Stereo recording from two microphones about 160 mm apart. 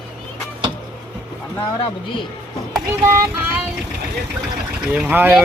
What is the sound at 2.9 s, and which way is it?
Speech, 20° right (ahead or behind).